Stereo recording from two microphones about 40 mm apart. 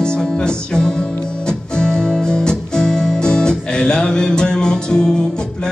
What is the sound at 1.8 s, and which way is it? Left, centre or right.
Music, centre.